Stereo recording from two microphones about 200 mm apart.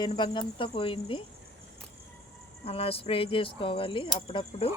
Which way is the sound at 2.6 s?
30° left (ahead or behind).